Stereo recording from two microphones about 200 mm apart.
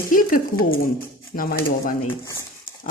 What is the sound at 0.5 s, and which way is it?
Speech, 45° left (ahead or behind).